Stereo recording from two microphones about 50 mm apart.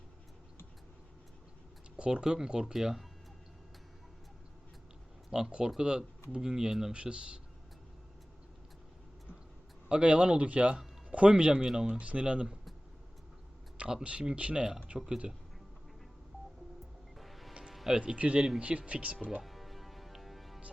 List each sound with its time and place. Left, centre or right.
2.0 s speech: centre
5.3 s speech: centre
6.9 s speech: right
9.9 s speech: right
13.7 s speech: right
17.2 s music: centre
17.9 s speech: right
19.4 s music: centre